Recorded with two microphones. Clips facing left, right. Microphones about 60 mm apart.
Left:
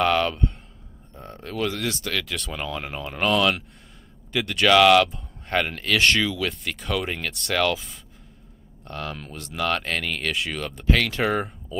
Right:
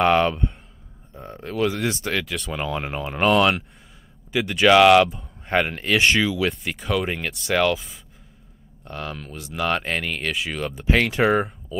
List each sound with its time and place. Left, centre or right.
0.0 s speech: centre
1.9 s speech: right
2.2 s speech: centre
2.6 s speech: centre
4.3 s speech: centre
4.6 s speech: centre
6.8 s speech: centre
10.9 s speech: centre